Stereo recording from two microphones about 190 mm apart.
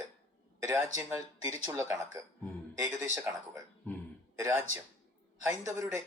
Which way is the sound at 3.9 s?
10° left (ahead or behind).